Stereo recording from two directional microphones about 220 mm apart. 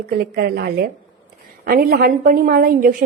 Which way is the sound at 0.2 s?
45° right (ahead or behind).